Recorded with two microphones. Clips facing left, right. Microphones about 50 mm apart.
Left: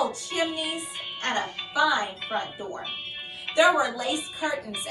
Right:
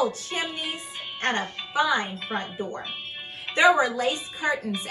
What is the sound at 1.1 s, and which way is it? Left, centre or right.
Speech, right.